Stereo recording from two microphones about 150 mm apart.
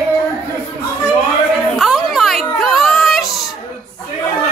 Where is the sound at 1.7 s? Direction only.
Centre (ahead or behind).